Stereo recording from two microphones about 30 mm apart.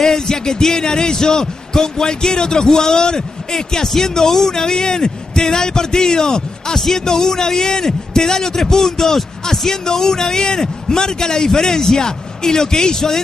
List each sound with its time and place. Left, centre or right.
0.0 s music: centre
0.7 s a man's voice: left
3.8 s speech: centre
4.5 s a man's voice: left